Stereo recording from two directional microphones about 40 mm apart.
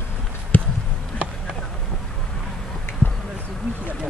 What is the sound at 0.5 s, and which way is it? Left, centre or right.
Basketball bounce, left.